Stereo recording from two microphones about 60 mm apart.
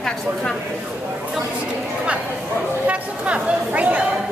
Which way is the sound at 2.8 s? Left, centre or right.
Right.